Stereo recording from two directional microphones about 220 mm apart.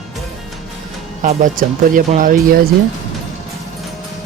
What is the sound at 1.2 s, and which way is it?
Speech, 35° right (ahead or behind).